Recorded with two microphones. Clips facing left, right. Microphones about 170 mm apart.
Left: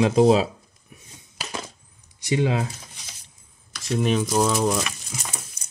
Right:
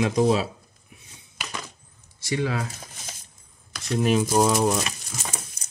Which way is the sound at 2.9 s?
45° right (ahead or behind).